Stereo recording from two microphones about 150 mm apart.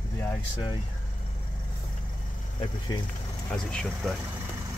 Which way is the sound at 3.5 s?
5° left (ahead or behind).